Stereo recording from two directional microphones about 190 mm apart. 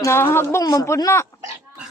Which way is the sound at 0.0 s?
15° left (ahead or behind).